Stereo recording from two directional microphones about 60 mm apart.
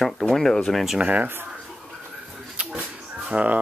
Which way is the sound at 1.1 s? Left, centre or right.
Right.